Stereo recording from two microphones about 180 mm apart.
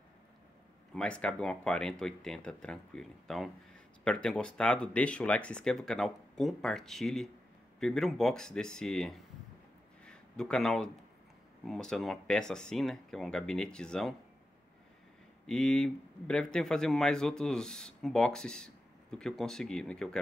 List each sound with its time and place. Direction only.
0.9 s speech: 5° left (ahead or behind)
10.0 s a sound: 5° left (ahead or behind)
11.6 s speech: 5° left (ahead or behind)
15.4 s speech: 5° left (ahead or behind)